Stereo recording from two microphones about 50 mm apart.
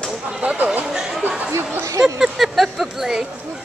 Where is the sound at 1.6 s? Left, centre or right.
Right.